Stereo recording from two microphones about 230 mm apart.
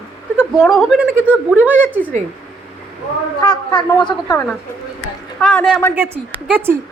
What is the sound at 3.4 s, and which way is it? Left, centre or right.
Speech, centre.